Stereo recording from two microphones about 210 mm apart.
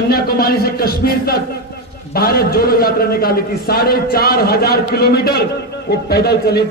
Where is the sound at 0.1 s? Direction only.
45° left (ahead or behind).